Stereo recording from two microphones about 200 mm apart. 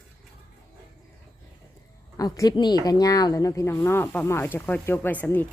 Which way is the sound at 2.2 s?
20° left (ahead or behind).